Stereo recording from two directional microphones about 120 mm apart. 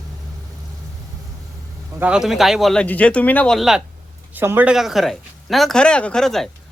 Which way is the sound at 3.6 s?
5° right (ahead or behind).